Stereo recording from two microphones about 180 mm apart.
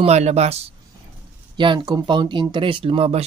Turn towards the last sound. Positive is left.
turn(degrees=-35)  # may be behind; listen again after turning